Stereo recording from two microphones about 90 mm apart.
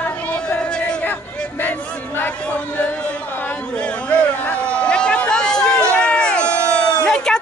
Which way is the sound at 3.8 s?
10° left (ahead or behind).